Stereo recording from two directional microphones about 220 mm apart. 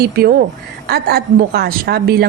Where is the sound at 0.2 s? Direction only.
45° right (ahead or behind).